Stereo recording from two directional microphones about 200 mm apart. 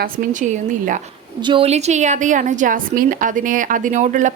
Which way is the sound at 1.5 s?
30° right (ahead or behind).